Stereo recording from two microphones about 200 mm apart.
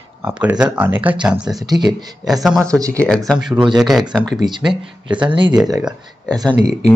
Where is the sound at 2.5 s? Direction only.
15° right (ahead or behind).